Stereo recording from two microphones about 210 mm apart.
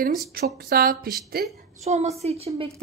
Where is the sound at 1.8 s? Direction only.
30° right (ahead or behind).